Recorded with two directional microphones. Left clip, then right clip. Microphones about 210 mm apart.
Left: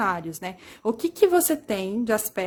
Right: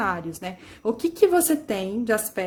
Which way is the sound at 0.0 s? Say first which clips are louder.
Left 1 dB; 40° left (ahead or behind).